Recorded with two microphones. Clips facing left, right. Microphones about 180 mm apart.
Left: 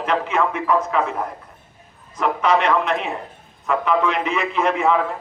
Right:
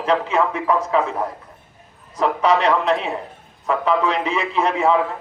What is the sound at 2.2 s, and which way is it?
A man's voice, 35° right (ahead or behind).